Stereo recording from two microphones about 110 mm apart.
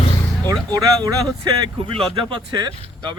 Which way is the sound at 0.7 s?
35° right (ahead or behind).